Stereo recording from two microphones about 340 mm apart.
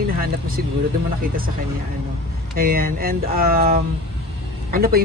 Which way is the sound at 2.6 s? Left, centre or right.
Right.